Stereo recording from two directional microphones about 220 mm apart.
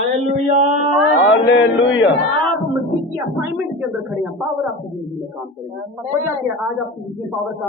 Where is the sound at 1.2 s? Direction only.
60° left (ahead or behind).